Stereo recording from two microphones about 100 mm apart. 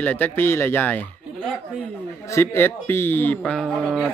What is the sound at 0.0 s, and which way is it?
Speech, 15° left (ahead or behind).